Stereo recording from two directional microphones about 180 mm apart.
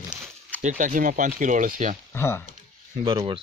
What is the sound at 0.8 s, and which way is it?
Speech, 50° right (ahead or behind).